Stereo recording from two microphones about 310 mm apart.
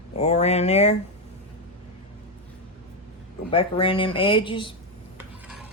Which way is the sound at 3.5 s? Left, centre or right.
Centre.